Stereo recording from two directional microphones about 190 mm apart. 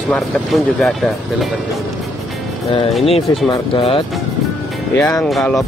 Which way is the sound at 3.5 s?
25° left (ahead or behind).